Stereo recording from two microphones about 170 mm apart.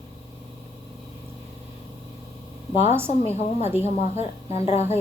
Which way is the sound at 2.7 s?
40° left (ahead or behind).